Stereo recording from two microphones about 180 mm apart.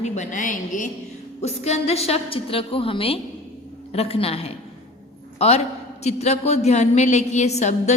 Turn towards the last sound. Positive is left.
turn(degrees=40)  # may be behind; listen again after turning